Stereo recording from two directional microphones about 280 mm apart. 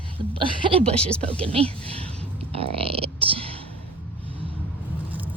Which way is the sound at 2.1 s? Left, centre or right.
Right.